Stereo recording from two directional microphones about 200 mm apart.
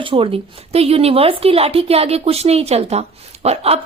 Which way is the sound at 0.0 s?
25° right (ahead or behind).